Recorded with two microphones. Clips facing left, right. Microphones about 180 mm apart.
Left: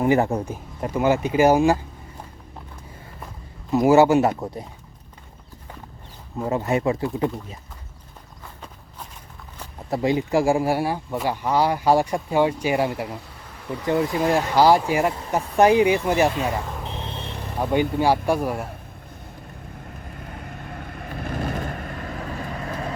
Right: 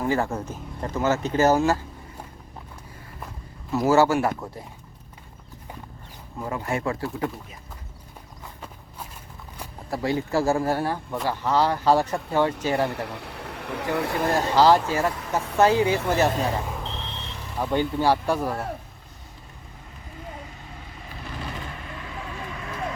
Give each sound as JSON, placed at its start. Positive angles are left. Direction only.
{"t": 0.0, "sound": "speech", "side_deg": 20}
{"t": 3.7, "sound": "speech", "side_deg": 15}
{"t": 6.4, "sound": "speech", "side_deg": 20}
{"t": 9.9, "sound": "speech", "side_deg": 20}
{"t": 13.1, "sound": "speech", "side_deg": -70}
{"t": 14.5, "sound": "speech", "side_deg": 10}
{"t": 16.8, "sound": "vehicle", "side_deg": 15}
{"t": 17.1, "sound": "vehicle", "side_deg": 55}
{"t": 17.6, "sound": "speech", "side_deg": 15}
{"t": 20.1, "sound": "vehicle", "side_deg": 60}